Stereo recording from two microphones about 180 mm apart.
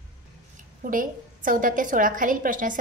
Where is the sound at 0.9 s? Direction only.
50° right (ahead or behind).